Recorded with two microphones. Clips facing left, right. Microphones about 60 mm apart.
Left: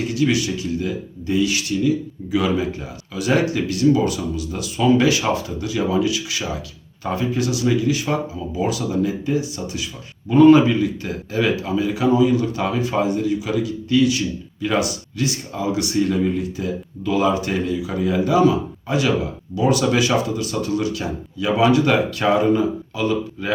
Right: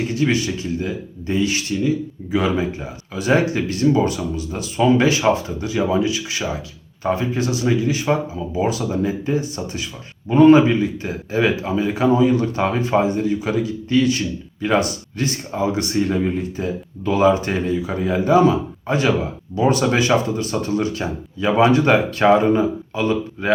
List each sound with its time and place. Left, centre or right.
0.1 s a man's voice: right